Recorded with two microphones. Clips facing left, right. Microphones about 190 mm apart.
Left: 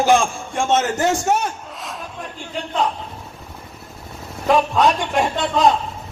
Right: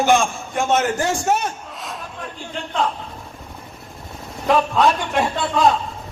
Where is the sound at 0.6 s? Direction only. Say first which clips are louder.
Left 1 dB; 25° left (ahead or behind).